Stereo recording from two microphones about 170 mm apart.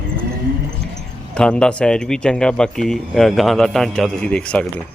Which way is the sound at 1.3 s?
5° left (ahead or behind).